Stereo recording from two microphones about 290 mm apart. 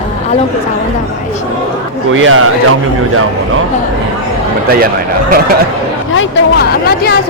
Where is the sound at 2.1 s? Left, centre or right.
Right.